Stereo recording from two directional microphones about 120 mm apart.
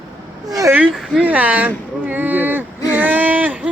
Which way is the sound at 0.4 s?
30° right (ahead or behind).